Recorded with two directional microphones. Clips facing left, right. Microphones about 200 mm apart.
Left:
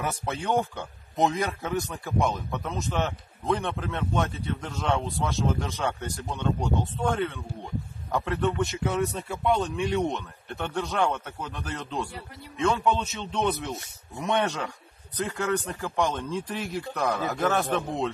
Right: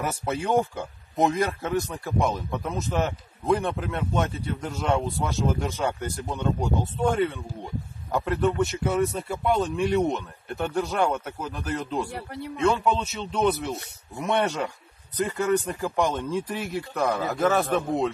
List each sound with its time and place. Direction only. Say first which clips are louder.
0.1 s speech: right 5 dB; 10° right (ahead or behind)
12.1 s a man's voice: right 7 dB; 65° right (ahead or behind)
12.6 s speech: right 2 dB; centre (ahead or behind)